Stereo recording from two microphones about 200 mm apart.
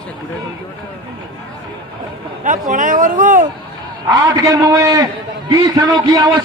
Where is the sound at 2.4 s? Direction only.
40° right (ahead or behind).